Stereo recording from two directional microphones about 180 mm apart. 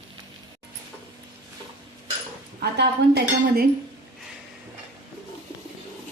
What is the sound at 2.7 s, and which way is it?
Speech, 65° right (ahead or behind).